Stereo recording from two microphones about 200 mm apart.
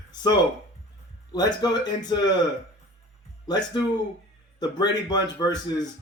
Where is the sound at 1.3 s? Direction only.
20° left (ahead or behind).